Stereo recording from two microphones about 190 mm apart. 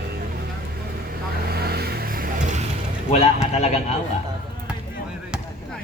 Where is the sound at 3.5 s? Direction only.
35° left (ahead or behind).